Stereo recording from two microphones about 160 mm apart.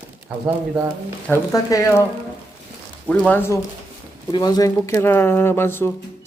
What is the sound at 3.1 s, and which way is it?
Speech, 10° left (ahead or behind).